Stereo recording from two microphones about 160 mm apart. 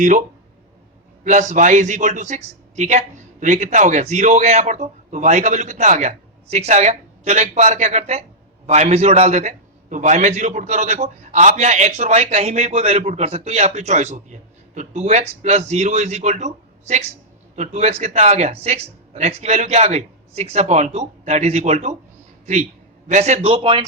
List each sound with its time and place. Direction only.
1.2 s a man's voice: 50° right (ahead or behind)
23.0 s a man's voice: 45° right (ahead or behind)